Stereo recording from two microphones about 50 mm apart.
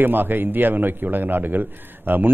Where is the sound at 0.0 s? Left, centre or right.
Right.